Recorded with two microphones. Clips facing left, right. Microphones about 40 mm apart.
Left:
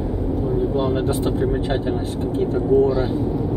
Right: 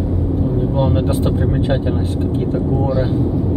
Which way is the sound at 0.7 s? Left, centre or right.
Right.